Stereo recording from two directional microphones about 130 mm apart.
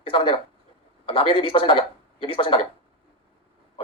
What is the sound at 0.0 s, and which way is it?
A man's voice, 40° left (ahead or behind).